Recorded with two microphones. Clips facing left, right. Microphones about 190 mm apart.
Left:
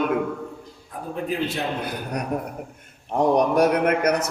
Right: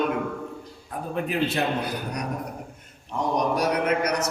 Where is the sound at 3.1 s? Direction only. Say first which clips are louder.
Left 6 dB; 55° left (ahead or behind).